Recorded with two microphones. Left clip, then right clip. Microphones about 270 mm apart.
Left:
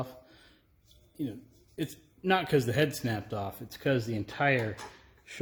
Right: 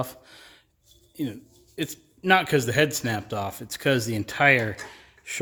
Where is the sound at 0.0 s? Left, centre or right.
Right.